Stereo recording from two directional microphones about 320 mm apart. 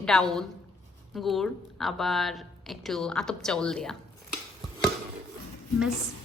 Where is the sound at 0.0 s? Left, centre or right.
Centre.